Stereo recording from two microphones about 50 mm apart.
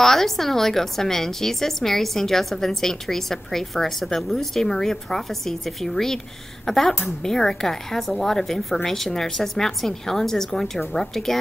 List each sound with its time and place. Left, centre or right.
0.0 s a woman's voice: centre